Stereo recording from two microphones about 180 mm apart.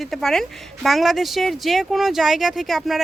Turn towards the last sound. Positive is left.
turn(degrees=0)  # may be behind; listen again after turning